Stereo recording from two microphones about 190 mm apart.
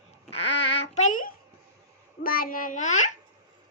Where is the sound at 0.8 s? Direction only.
40° left (ahead or behind).